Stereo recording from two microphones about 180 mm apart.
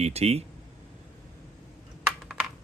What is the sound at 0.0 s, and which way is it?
Speech, 35° right (ahead or behind).